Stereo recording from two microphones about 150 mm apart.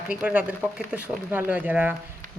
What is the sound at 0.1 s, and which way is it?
Speech, 10° right (ahead or behind).